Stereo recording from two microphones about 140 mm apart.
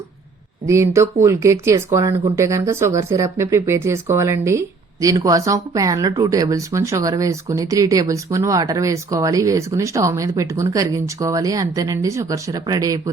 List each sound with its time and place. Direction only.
0.7 s speech: 20° right (ahead or behind)